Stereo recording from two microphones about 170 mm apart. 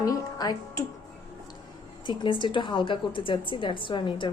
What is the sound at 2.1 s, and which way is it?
A woman's voice, 30° left (ahead or behind).